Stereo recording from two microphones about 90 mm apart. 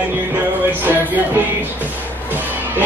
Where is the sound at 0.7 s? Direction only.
20° right (ahead or behind).